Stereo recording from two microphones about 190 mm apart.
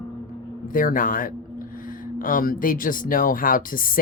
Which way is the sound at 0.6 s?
45° left (ahead or behind).